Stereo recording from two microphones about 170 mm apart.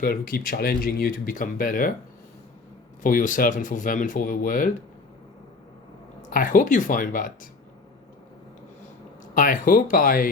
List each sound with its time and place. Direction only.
0.0 s speech: 60° left (ahead or behind)
3.0 s speech: 50° left (ahead or behind)
6.3 s speech: 50° left (ahead or behind)
9.3 s speech: 50° left (ahead or behind)